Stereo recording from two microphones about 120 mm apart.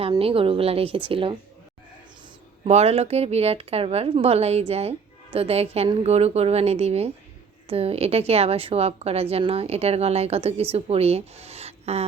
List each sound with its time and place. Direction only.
0.2 s speech: 50° right (ahead or behind)
2.6 s speech: 60° right (ahead or behind)